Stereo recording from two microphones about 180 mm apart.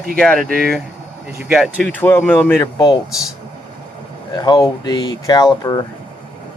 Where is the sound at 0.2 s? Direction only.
5° left (ahead or behind).